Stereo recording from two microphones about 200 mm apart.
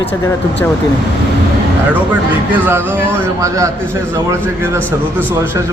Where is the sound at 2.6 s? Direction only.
10° right (ahead or behind).